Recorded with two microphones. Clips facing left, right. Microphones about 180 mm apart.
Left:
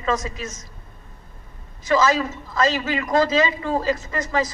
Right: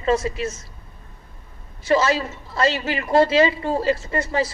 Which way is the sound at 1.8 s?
30° right (ahead or behind).